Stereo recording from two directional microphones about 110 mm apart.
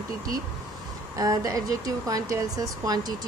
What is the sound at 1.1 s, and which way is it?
Speech, 30° right (ahead or behind).